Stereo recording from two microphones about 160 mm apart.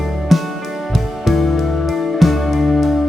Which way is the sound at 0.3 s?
Centre (ahead or behind).